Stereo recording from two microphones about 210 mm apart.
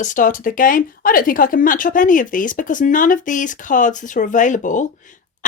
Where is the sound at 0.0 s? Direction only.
40° left (ahead or behind).